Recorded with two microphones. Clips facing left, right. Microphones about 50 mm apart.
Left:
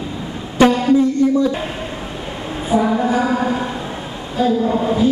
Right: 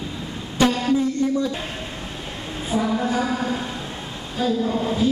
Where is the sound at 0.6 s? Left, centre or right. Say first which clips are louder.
Left 7 dB; left.